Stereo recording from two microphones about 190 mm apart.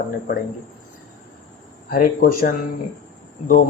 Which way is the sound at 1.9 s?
50° left (ahead or behind).